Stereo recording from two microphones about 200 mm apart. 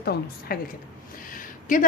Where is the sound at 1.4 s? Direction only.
40° left (ahead or behind).